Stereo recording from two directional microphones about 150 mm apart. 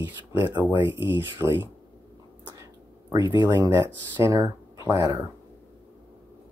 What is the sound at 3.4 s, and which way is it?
Speech, 30° right (ahead or behind).